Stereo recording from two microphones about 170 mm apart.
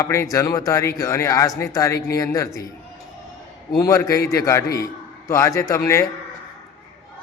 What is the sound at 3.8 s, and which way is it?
Speech, 20° left (ahead or behind).